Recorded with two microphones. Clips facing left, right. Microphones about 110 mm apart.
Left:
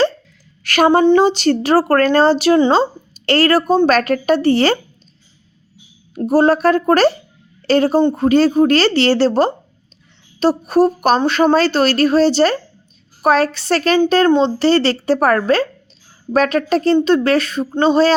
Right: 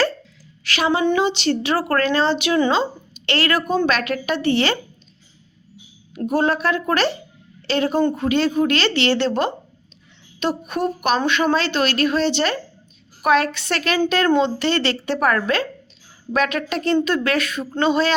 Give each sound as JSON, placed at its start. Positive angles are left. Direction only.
{"t": 0.6, "sound": "a sound", "side_deg": 50}
{"t": 1.0, "sound": "speech", "side_deg": 35}
{"t": 6.1, "sound": "speech", "side_deg": 40}